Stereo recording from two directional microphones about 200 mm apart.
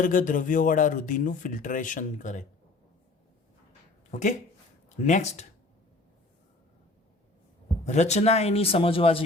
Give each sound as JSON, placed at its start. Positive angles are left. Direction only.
{"t": 0.0, "sound": "speech", "side_deg": 40}
{"t": 4.1, "sound": "speech", "side_deg": 40}
{"t": 7.9, "sound": "speech", "side_deg": 35}